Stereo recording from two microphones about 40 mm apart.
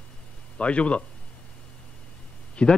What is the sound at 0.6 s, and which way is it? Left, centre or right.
Speech, left.